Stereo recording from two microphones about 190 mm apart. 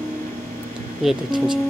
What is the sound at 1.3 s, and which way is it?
Speech, 25° right (ahead or behind).